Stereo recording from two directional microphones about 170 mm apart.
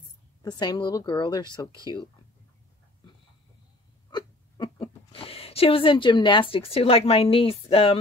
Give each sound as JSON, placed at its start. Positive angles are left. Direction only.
{"t": 0.4, "sound": "speech", "side_deg": 25}
{"t": 4.1, "sound": "a sound", "side_deg": 25}
{"t": 5.1, "sound": "speech", "side_deg": 35}